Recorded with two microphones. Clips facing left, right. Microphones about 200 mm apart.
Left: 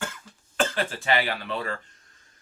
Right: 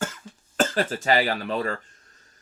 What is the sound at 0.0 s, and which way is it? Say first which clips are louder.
Cough: right 4 dB; 40° right (ahead or behind).